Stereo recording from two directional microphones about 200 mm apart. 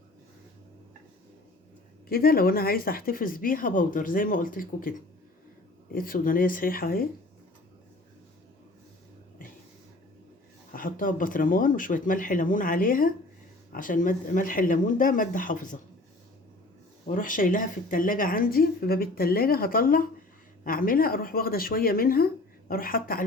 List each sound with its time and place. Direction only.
2.0 s speech: 50° left (ahead or behind)
10.7 s speech: 45° left (ahead or behind)
17.1 s speech: 40° left (ahead or behind)